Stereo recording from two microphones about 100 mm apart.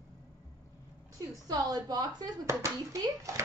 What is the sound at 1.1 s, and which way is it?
A woman's voice, 35° right (ahead or behind).